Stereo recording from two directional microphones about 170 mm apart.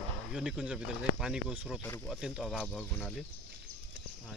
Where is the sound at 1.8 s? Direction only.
10° left (ahead or behind).